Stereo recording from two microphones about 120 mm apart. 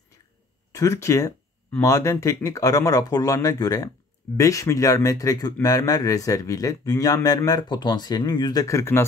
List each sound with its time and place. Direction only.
0.7 s speech: 25° left (ahead or behind)